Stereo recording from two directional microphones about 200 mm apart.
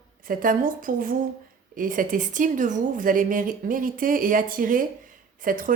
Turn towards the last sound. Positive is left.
turn(degrees=-45)  # may be behind; listen again after turning